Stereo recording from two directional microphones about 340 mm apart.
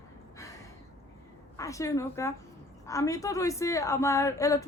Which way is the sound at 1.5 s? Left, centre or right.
Centre.